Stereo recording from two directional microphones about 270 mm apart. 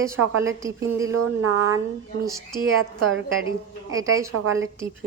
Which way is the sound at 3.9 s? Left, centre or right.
Centre.